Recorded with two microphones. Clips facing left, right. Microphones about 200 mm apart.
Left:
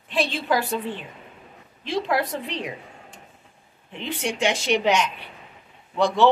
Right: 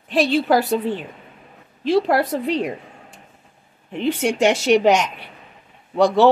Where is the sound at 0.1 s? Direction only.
40° right (ahead or behind).